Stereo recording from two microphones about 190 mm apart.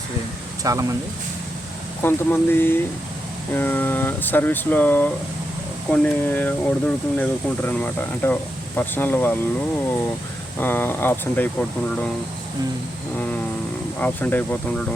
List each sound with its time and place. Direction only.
0.6 s speech: 15° right (ahead or behind)
2.0 s speech: 10° left (ahead or behind)
10.6 s speech: 10° left (ahead or behind)
14.0 s speech: 10° left (ahead or behind)